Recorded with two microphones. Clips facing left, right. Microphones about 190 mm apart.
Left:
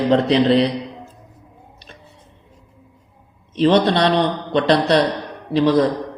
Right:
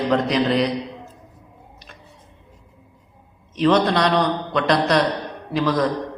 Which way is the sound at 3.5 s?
30° left (ahead or behind).